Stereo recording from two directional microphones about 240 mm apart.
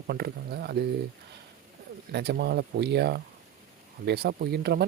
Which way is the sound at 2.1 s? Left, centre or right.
Right.